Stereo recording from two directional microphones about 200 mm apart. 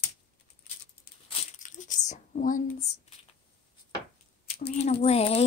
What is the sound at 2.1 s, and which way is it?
Speech, 40° left (ahead or behind).